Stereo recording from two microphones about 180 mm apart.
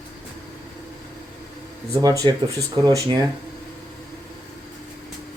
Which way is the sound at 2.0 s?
20° right (ahead or behind).